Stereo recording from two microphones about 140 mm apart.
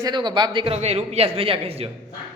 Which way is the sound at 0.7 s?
50° right (ahead or behind).